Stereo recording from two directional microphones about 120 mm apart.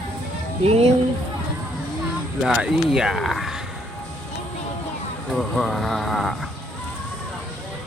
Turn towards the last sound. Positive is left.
turn(degrees=0)  # may be behind; listen again after turning